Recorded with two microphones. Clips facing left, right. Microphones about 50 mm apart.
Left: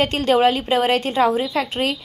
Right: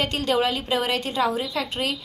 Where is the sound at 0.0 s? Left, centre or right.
Left.